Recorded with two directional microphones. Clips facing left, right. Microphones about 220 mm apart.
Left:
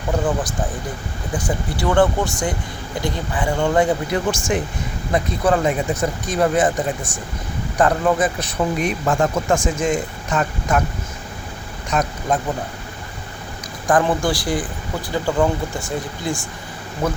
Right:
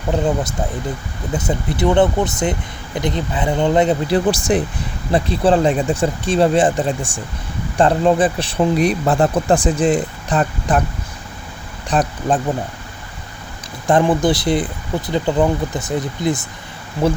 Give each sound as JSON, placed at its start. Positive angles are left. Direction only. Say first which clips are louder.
{"t": 1.3, "sound": "speech", "louder": "right 3 dB", "side_deg": -20}
{"t": 4.3, "sound": "speech", "louder": "right 4 dB", "side_deg": -35}
{"t": 11.9, "sound": "speech", "louder": "right 3 dB", "side_deg": -30}
{"t": 13.8, "sound": "speech", "louder": "right 3 dB", "side_deg": -20}